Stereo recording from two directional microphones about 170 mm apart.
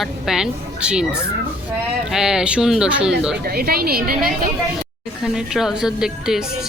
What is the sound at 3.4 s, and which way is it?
Speech, 60° right (ahead or behind).